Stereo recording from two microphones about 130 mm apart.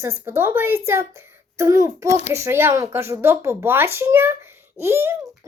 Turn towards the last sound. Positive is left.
turn(degrees=-20)  # may be behind; listen again after turning